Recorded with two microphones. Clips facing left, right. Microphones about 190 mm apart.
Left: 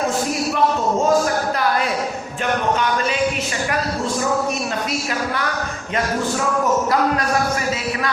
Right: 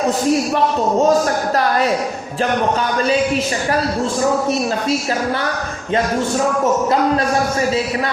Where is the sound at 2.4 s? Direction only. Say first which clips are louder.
Right 3 dB; 35° right (ahead or behind).